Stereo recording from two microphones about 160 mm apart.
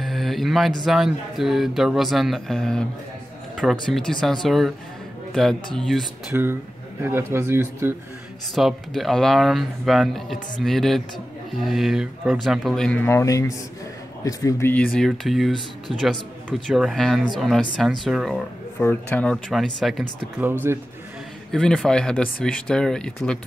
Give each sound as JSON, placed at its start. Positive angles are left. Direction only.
{"t": 0.0, "sound": "speech", "side_deg": 0}
{"t": 3.9, "sound": "speech", "side_deg": 5}
{"t": 6.3, "sound": "speech", "side_deg": -10}
{"t": 8.5, "sound": "speech", "side_deg": 0}
{"t": 15.0, "sound": "speech", "side_deg": 0}
{"t": 18.8, "sound": "speech", "side_deg": 10}
{"t": 21.5, "sound": "speech", "side_deg": 5}